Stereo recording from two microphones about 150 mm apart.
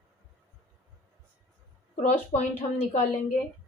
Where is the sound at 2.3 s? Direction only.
45° left (ahead or behind).